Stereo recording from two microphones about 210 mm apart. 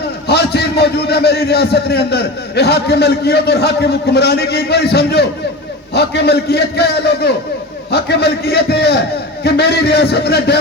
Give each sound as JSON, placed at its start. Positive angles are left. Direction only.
{"t": 0.3, "sound": "a man's voice", "side_deg": 50}